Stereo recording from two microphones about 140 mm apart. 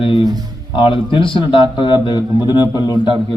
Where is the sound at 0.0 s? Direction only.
40° left (ahead or behind).